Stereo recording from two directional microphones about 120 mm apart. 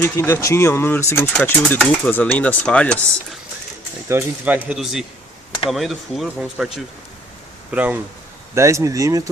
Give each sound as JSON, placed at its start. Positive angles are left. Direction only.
{"t": 0.0, "sound": "speech", "side_deg": 20}
{"t": 4.1, "sound": "speech", "side_deg": -15}
{"t": 4.7, "sound": "speech", "side_deg": -5}
{"t": 7.7, "sound": "speech", "side_deg": -10}
{"t": 8.5, "sound": "speech", "side_deg": -25}